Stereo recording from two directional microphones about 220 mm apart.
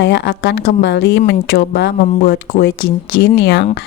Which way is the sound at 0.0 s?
55° left (ahead or behind).